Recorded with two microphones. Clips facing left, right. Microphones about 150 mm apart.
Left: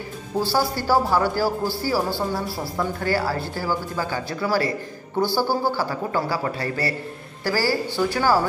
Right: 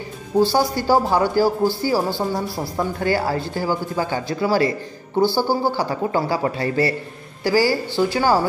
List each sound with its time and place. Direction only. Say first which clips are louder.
0.4 s a man's voice: right 5 dB; 20° right (ahead or behind)